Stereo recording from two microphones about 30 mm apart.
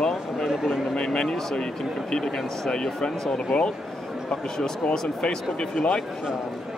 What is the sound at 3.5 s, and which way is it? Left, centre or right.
Speech, left.